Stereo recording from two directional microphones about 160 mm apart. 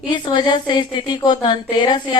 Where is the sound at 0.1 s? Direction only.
30° left (ahead or behind).